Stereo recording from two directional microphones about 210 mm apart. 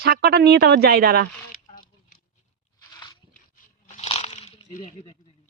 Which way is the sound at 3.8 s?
30° left (ahead or behind).